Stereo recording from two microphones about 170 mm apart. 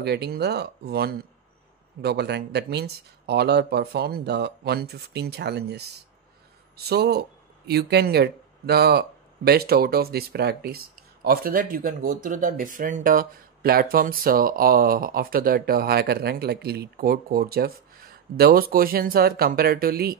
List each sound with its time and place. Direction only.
0.0 s speech: 75° right (ahead or behind)